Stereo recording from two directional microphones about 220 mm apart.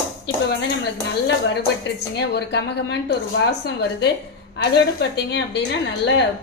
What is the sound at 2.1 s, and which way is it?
A woman's voice, 50° left (ahead or behind).